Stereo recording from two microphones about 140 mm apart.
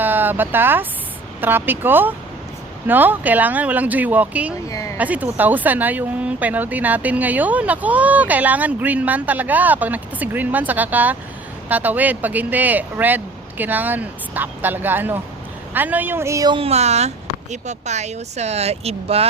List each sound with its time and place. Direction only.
0.0 s speech: 15° right (ahead or behind)
4.7 s speech: 25° left (ahead or behind)
4.9 s speech: 10° right (ahead or behind)
16.5 s speech: 45° right (ahead or behind)